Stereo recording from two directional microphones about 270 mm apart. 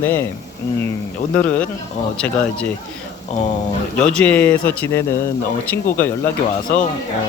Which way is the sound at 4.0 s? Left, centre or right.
Centre.